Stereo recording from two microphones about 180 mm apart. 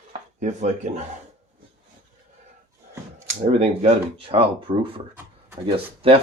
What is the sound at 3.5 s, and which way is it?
Speech, 35° right (ahead or behind).